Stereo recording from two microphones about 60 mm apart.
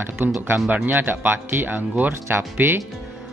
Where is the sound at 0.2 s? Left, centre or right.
Right.